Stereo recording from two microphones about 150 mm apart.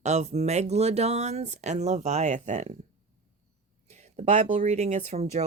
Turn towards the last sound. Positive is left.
turn(degrees=-50)  # may be behind; listen again after turning